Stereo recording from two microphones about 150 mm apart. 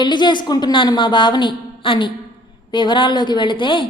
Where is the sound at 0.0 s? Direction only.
30° left (ahead or behind).